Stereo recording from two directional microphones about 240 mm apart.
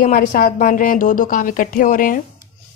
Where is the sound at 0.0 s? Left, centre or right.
Left.